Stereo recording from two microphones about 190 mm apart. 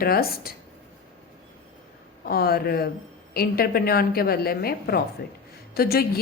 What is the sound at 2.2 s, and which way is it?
A woman's voice, 50° left (ahead or behind).